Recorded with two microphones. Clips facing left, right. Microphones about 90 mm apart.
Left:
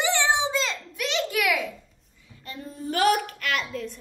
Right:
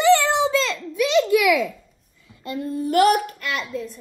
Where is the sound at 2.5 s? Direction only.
65° right (ahead or behind).